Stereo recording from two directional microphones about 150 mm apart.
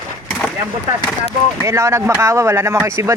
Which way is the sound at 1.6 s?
20° right (ahead or behind).